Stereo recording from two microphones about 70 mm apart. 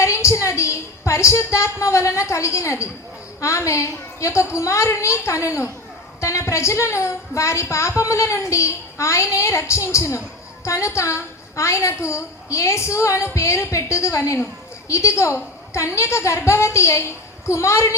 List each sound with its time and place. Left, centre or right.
0.0 s a woman's voice: left